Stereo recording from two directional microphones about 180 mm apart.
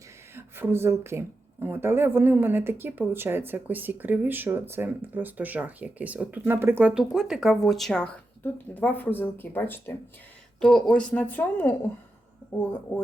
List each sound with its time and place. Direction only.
0.3 s speech: 15° right (ahead or behind); by 11.7 s 10° left (ahead or behind)